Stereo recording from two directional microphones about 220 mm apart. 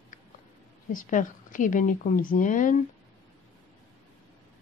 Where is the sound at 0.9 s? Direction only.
35° left (ahead or behind).